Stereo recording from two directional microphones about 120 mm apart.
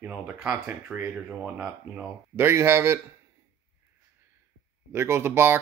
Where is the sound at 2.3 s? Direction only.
20° right (ahead or behind).